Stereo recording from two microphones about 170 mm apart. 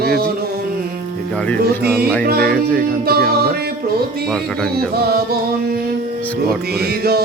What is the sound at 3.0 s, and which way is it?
Music, 65° right (ahead or behind).